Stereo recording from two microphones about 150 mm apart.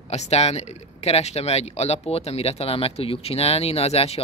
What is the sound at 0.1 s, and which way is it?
Speech, 45° left (ahead or behind).